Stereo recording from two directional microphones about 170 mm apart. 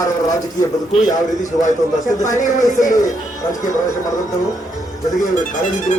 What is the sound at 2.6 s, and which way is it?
Speech, 50° left (ahead or behind).